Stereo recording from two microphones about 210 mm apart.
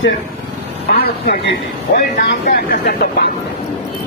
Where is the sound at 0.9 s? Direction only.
45° left (ahead or behind).